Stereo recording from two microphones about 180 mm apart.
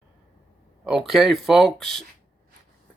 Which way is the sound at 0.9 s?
Centre (ahead or behind).